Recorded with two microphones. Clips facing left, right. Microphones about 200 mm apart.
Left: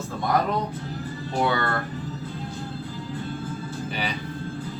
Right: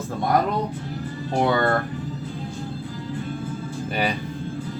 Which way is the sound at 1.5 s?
45° right (ahead or behind).